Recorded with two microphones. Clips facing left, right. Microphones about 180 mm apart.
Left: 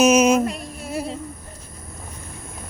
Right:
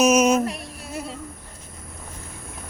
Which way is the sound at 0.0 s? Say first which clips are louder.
Left 2 dB; centre (ahead or behind).